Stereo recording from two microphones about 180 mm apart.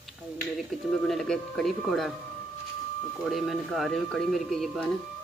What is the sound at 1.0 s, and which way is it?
Speech, 5° left (ahead or behind).